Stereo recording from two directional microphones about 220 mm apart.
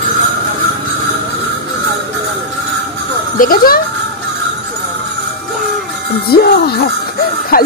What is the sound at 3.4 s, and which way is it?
Speech, 40° left (ahead or behind).